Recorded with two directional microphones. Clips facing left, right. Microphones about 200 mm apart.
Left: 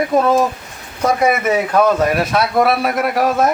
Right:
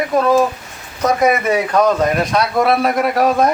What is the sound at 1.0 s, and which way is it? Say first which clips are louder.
Speech: right 1 dB; 5° left (ahead or behind).